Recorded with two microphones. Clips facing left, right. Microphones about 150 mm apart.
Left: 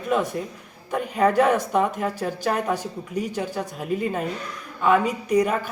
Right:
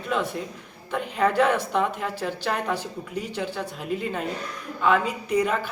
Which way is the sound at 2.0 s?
45° left (ahead or behind).